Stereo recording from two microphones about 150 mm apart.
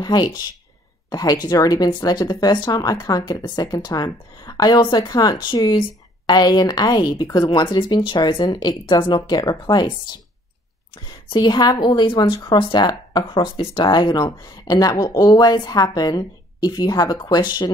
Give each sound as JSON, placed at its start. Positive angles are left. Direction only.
{"t": 0.0, "sound": "speech", "side_deg": 30}
{"t": 11.2, "sound": "speech", "side_deg": 30}